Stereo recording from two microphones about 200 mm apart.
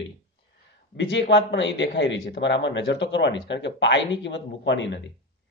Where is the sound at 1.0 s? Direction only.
65° left (ahead or behind).